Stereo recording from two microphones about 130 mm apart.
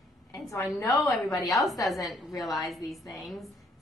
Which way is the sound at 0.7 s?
20° left (ahead or behind).